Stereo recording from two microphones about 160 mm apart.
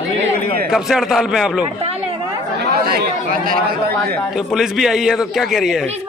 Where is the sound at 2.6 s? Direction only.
85° right; by 3.5 s 65° right (ahead or behind).